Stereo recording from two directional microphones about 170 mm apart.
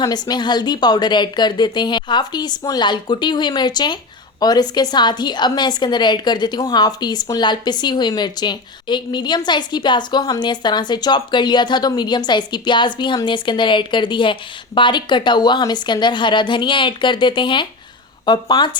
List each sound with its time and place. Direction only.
0.0 s a woman's voice: 25° left (ahead or behind)